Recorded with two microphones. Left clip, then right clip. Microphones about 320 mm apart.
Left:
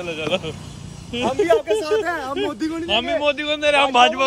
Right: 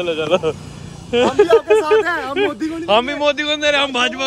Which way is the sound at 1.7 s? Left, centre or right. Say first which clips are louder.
Right 6 dB; right.